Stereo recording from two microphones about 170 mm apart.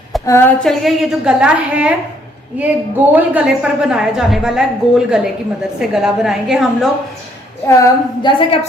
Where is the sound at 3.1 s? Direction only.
5° right (ahead or behind).